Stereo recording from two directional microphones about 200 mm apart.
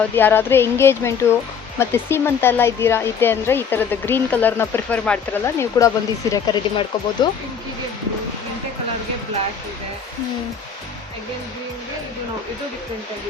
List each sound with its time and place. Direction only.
0.2 s speech: 10° left (ahead or behind)
6.3 s speech: 20° left (ahead or behind)